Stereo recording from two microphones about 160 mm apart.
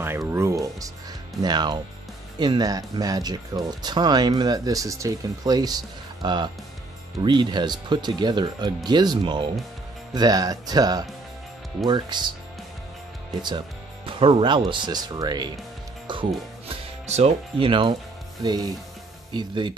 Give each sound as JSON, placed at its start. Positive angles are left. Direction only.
{"t": 0.0, "sound": "music", "side_deg": -15}
{"t": 1.4, "sound": "speech", "side_deg": -25}
{"t": 14.2, "sound": "speech", "side_deg": -35}
{"t": 16.6, "sound": "speech", "side_deg": -40}